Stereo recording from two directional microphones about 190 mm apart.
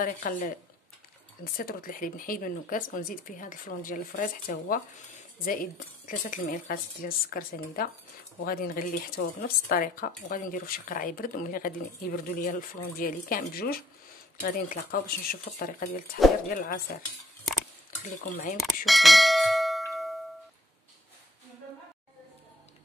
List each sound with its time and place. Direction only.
0.0 s speech: 45° left (ahead or behind)
18.0 s speech: 45° left (ahead or behind)
18.9 s bell: centre (ahead or behind)